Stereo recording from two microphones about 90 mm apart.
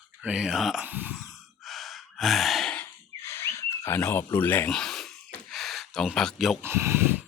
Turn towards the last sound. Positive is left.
turn(degrees=-30)  # may be behind; listen again after turning